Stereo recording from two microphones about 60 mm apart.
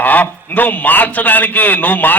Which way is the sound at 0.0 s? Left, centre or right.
Left.